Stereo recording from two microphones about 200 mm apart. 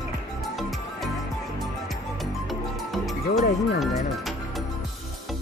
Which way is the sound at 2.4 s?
Centre (ahead or behind).